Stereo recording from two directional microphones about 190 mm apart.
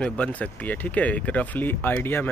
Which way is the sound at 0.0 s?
5° left (ahead or behind).